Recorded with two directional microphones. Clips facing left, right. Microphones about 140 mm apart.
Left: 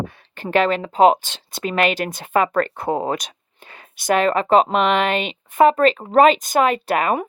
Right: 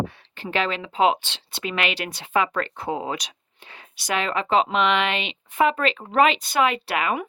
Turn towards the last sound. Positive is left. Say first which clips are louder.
# left 5 dB
turn(degrees=40)  # may be behind; listen again after turning